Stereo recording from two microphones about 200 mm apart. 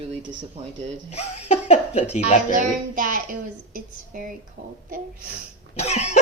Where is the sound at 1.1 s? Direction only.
30° left (ahead or behind).